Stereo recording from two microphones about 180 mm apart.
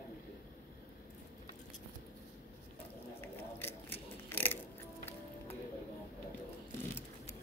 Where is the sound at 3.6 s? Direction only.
15° left (ahead or behind).